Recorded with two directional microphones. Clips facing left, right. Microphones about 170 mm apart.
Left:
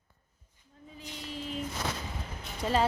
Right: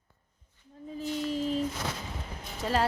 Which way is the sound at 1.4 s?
40° right (ahead or behind).